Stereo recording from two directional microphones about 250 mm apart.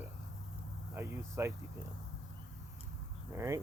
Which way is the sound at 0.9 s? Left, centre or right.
Centre.